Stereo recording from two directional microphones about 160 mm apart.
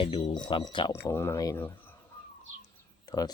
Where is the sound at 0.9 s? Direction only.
15° left (ahead or behind).